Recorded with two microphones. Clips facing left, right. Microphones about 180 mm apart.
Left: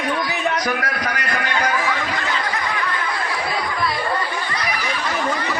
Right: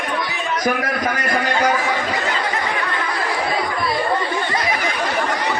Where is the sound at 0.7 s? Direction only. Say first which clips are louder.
Right 3 dB; 50° right (ahead or behind).